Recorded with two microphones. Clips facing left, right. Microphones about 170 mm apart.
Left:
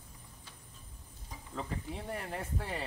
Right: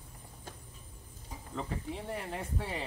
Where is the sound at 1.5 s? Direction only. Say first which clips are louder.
Right 2 dB; centre (ahead or behind).